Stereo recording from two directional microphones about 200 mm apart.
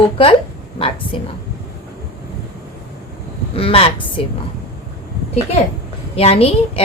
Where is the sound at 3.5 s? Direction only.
30° left (ahead or behind).